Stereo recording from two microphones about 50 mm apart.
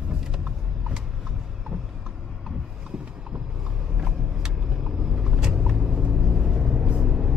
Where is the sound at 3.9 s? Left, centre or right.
Centre.